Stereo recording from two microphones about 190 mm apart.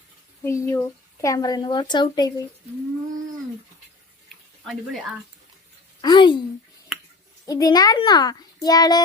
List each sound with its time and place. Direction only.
0.4 s speech: 15° left (ahead or behind)
6.0 s a sound: 25° left (ahead or behind)
7.4 s speech: 20° left (ahead or behind)